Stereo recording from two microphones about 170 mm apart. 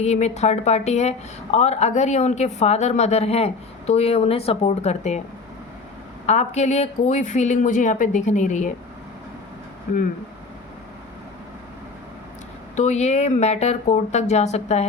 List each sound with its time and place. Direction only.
0.0 s a woman's voice: 40° left (ahead or behind)
6.2 s speech: 40° left (ahead or behind)
12.7 s a woman's voice: 40° left (ahead or behind)